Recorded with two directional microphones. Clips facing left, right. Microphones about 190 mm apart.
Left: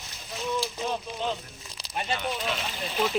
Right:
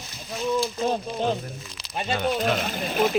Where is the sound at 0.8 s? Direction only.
45° right (ahead or behind).